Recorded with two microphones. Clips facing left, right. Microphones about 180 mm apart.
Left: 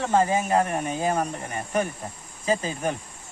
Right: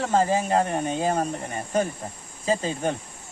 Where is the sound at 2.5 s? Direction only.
30° right (ahead or behind).